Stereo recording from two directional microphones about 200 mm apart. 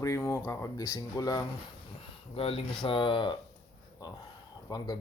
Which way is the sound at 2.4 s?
30° left (ahead or behind).